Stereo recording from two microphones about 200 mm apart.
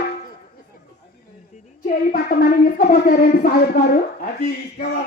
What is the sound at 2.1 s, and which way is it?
Music, 45° left (ahead or behind).